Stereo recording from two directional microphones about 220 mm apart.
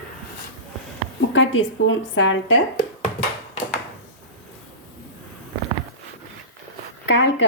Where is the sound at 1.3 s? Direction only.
60° left (ahead or behind).